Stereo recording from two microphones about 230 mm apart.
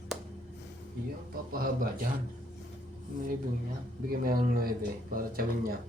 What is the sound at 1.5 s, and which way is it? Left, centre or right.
Speech, right.